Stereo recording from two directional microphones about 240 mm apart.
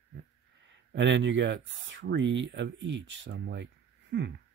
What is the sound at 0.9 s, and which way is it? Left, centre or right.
Speech, right.